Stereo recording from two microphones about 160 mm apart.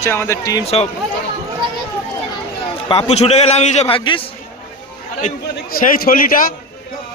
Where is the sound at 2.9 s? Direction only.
40° left (ahead or behind).